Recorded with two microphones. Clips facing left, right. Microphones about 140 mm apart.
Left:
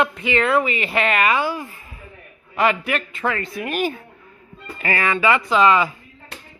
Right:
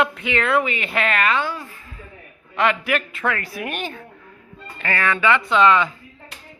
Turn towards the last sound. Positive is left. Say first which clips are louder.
# even
turn(degrees=5)  # may be behind; listen again after turning